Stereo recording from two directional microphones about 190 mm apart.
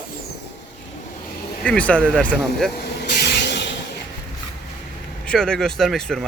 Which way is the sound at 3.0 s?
60° left (ahead or behind).